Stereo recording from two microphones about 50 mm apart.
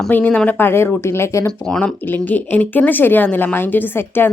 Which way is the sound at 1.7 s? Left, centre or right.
Centre.